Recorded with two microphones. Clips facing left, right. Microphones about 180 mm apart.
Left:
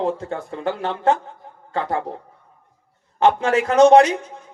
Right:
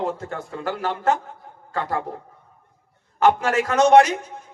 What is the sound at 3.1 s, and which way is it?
Speech, 30° left (ahead or behind).